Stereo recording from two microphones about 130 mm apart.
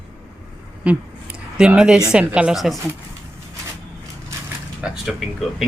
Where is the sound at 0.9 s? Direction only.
10° right (ahead or behind).